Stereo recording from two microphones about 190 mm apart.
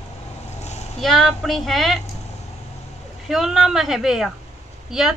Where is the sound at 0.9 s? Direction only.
Centre (ahead or behind).